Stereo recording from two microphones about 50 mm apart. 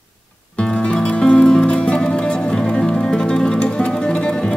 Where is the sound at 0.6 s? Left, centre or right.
Left.